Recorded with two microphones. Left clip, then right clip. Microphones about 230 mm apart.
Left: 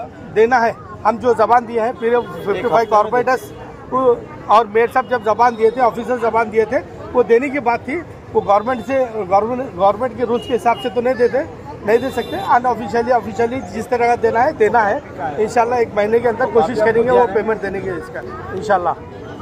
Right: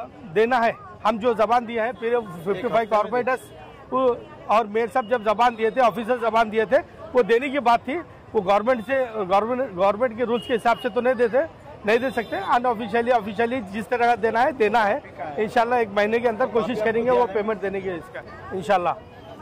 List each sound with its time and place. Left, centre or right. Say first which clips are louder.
0.3 s a man's voice: left 6 dB; right